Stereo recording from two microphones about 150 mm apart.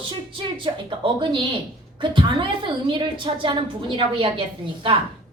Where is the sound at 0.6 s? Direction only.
35° right (ahead or behind).